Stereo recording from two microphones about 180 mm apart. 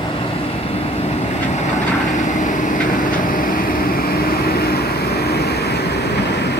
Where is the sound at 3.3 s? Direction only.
50° left (ahead or behind).